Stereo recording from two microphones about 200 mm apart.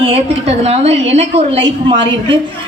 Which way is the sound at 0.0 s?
30° right (ahead or behind).